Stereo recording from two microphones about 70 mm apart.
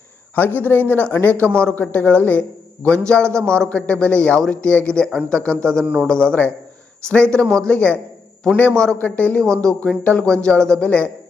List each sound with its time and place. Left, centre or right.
0.3 s speech: left
5.8 s a man's voice: centre
6.1 s speech: centre
9.4 s speech: centre